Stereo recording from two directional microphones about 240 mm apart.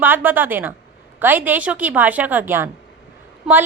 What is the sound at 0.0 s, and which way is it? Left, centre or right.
A woman's voice, centre.